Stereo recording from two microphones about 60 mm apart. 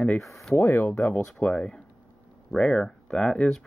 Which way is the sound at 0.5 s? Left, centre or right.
Left.